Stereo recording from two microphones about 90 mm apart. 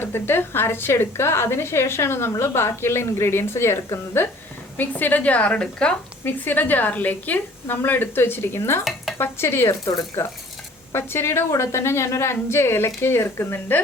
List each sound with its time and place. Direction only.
0.0 s a woman's voice: 25° left (ahead or behind)
4.8 s a woman's voice: 20° left (ahead or behind)
6.2 s a woman's voice: 20° left (ahead or behind)
9.9 s a woman's voice: 40° left (ahead or behind)
10.9 s a woman's voice: 30° left (ahead or behind)